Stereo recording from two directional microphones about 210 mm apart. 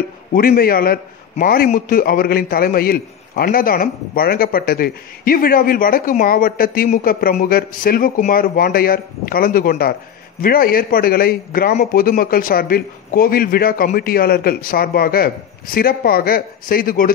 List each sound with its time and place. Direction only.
0.3 s a man's voice: 45° left (ahead or behind)